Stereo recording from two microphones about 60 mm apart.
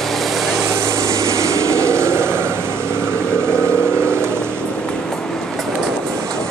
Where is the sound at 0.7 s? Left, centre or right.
Right.